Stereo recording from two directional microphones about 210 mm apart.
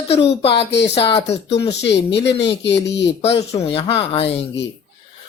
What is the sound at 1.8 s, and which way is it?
Speech, 55° left (ahead or behind).